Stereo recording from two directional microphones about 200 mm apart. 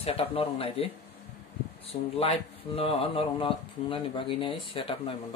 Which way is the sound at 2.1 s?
30° left (ahead or behind).